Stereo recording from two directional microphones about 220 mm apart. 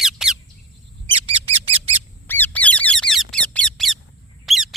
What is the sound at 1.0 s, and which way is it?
Bird, 25° right (ahead or behind).